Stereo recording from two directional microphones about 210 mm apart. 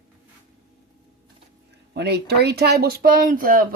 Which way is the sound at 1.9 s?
50° right (ahead or behind).